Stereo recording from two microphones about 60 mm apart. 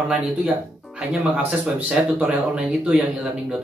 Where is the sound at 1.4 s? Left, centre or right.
Right.